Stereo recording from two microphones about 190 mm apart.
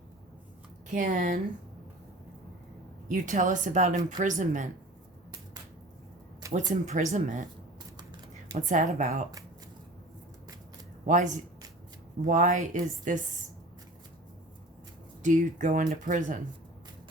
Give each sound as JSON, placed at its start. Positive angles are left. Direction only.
{"t": 0.9, "sound": "speech", "side_deg": -45}
{"t": 3.1, "sound": "speech", "side_deg": -40}
{"t": 6.4, "sound": "speech", "side_deg": -15}
{"t": 6.8, "sound": "speech", "side_deg": -40}
{"t": 8.5, "sound": "speech", "side_deg": -40}
{"t": 11.0, "sound": "speech", "side_deg": -40}
{"t": 15.2, "sound": "speech", "side_deg": -40}